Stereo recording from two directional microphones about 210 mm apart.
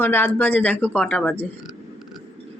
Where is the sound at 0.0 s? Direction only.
10° left (ahead or behind).